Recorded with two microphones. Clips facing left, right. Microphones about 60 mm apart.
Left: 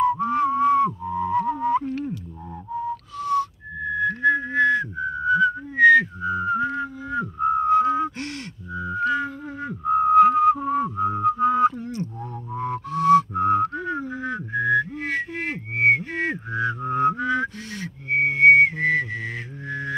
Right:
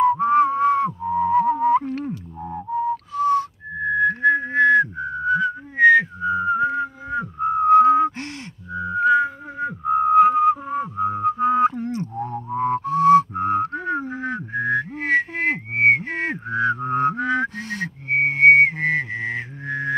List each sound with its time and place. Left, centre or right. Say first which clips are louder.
0.0 s music: right 4 dB; right
0.8 s music: right 4 dB; right
3.2 s whistling: right 4 dB; right
5.3 s whistling: left 2 dB; right
6.2 s whistling: right 3 dB; centre
7.7 s a sound: right 9 dB; right
8.7 s whistling: right 6 dB; centre
12.0 s music: right 4 dB; right
13.3 s whistling: left 1 dB; right